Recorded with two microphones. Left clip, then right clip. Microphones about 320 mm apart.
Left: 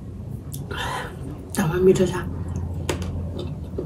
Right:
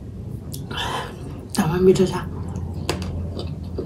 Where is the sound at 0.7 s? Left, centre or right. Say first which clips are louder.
Right 2 dB; centre.